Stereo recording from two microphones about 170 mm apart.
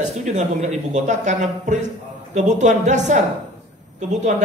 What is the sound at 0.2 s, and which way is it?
A man's voice, 45° right (ahead or behind).